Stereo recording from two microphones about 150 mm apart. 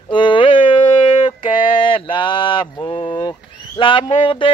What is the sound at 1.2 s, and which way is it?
Mantra, 35° left (ahead or behind).